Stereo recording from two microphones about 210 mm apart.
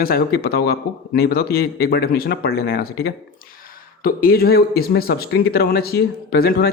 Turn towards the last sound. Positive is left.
turn(degrees=50)  # may be behind; listen again after turning